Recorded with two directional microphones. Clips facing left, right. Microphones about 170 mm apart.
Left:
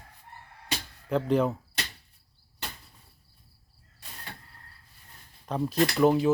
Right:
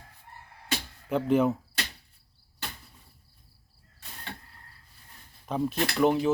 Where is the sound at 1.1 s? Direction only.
Centre (ahead or behind).